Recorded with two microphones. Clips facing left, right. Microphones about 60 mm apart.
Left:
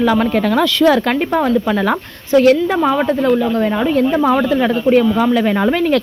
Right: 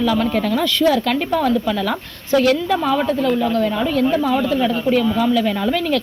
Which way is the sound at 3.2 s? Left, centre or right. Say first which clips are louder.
Left 4 dB; centre.